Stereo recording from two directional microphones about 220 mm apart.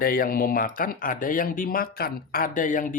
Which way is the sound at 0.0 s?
40° left (ahead or behind).